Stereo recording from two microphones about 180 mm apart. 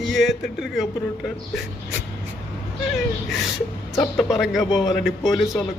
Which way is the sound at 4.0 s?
Centre (ahead or behind).